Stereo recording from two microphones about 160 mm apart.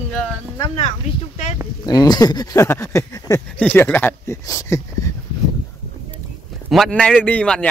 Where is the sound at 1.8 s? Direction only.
25° left (ahead or behind).